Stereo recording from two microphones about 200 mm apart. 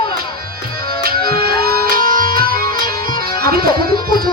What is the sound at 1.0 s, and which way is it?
Music, 50° right (ahead or behind).